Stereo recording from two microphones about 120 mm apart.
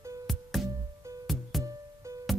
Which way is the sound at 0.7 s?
30° right (ahead or behind).